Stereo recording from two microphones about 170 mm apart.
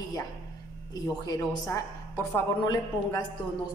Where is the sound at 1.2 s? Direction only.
20° left (ahead or behind).